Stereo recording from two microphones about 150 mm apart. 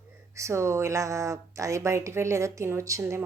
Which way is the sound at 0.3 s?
20° right (ahead or behind).